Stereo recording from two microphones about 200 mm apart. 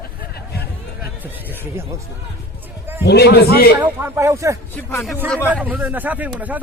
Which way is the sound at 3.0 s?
55° left (ahead or behind).